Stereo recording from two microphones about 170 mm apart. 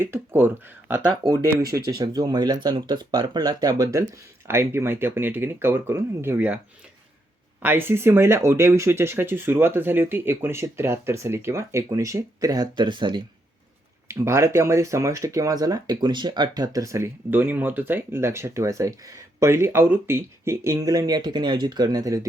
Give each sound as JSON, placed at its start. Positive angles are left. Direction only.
{"t": 0.0, "sound": "speech", "side_deg": -10}
{"t": 1.2, "sound": "speech", "side_deg": -65}
{"t": 2.0, "sound": "speech", "side_deg": -25}
{"t": 7.6, "sound": "speech", "side_deg": -10}
{"t": 14.1, "sound": "speech", "side_deg": -15}